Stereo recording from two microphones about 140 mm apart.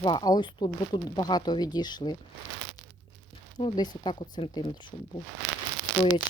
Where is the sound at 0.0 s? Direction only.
30° left (ahead or behind).